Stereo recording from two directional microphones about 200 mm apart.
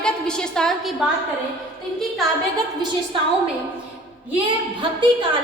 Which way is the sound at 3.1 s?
25° right (ahead or behind).